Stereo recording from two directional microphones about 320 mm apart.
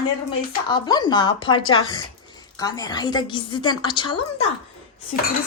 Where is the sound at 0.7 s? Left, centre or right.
Centre.